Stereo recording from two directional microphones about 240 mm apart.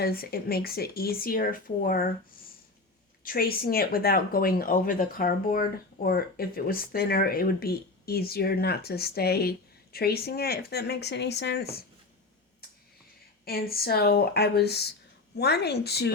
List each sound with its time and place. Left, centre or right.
0.0 s speech: left
3.2 s speech: left
13.4 s speech: left